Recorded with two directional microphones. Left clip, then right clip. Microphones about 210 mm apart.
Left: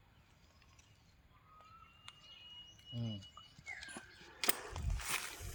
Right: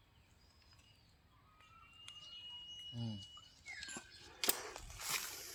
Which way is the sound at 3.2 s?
Centre (ahead or behind).